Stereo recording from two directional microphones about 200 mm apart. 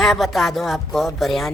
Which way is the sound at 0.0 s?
Centre (ahead or behind).